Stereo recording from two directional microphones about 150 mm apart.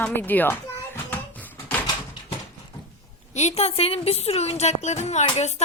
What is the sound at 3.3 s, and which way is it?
Speech, 45° left (ahead or behind).